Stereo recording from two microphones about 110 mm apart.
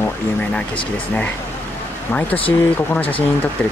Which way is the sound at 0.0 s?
10° left (ahead or behind).